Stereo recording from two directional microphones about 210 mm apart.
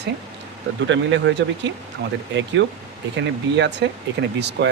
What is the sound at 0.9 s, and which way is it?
Speech, 60° right (ahead or behind).